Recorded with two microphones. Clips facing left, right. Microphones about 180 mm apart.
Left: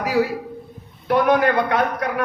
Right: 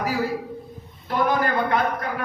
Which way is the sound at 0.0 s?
75° left (ahead or behind).